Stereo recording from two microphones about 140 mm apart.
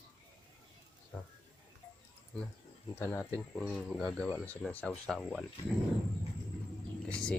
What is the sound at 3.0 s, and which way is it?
Speech, 20° left (ahead or behind).